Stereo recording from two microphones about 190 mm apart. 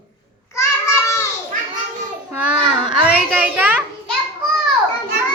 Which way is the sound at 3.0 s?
10° right (ahead or behind).